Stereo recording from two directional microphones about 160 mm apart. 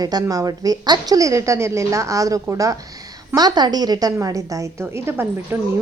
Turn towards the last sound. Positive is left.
turn(degrees=-15)  # may be behind; listen again after turning